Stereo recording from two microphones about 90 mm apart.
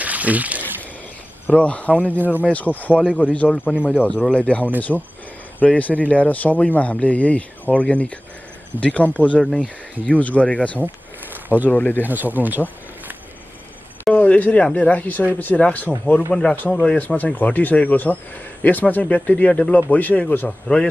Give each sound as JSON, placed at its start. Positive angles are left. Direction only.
{"t": 0.0, "sound": "a sound", "side_deg": -15}
{"t": 1.5, "sound": "speech", "side_deg": 15}
{"t": 2.9, "sound": "speech", "side_deg": -10}
{"t": 3.3, "sound": "speech", "side_deg": 15}
{"t": 11.4, "sound": "speech", "side_deg": -20}
{"t": 11.7, "sound": "speech", "side_deg": 20}
{"t": 12.1, "sound": "speech", "side_deg": -20}
{"t": 14.1, "sound": "speech", "side_deg": 15}